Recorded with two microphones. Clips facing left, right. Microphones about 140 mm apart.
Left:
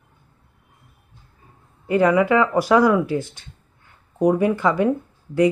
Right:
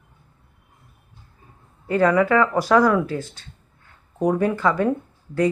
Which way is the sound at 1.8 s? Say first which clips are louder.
Left 1 dB; 15° left (ahead or behind).